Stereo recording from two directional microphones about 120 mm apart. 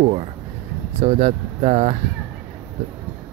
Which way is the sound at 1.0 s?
70° right (ahead or behind).